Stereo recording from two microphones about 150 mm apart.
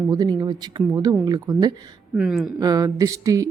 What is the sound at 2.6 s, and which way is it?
Speech, 25° right (ahead or behind).